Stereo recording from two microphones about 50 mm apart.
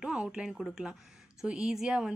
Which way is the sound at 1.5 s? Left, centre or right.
Centre.